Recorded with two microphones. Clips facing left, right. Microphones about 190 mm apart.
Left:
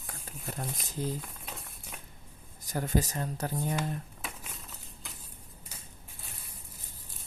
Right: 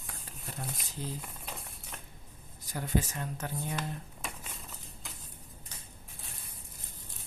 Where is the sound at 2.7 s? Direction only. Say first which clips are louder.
Left 2 dB; 45° left (ahead or behind).